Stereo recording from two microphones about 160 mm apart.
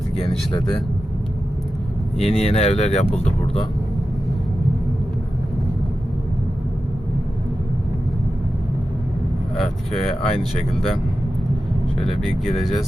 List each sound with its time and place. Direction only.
0.2 s speech: 35° left (ahead or behind)
2.2 s speech: 40° left (ahead or behind)
10.0 s speech: 35° left (ahead or behind)
12.0 s speech: centre (ahead or behind)